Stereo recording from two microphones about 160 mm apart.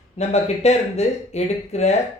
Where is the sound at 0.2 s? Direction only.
45° left (ahead or behind).